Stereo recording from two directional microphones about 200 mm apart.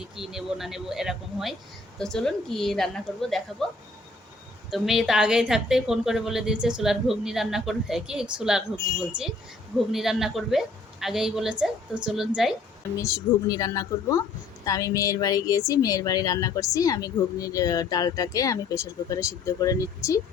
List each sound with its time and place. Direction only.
0.2 s a woman's voice: centre (ahead or behind)
4.7 s a woman's voice: centre (ahead or behind)
13.0 s a woman's voice: 15° left (ahead or behind)